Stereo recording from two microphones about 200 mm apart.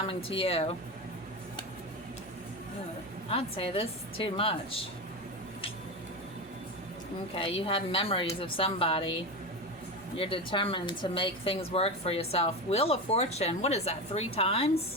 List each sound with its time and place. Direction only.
0.1 s speech: 25° left (ahead or behind)
3.2 s speech: 30° left (ahead or behind)
7.3 s speech: 25° left (ahead or behind)
10.2 s speech: 25° left (ahead or behind)